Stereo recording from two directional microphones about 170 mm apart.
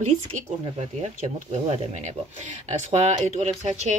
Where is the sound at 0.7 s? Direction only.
40° right (ahead or behind).